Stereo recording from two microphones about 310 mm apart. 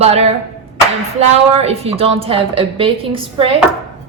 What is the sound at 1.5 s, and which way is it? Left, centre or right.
A woman's voice, centre.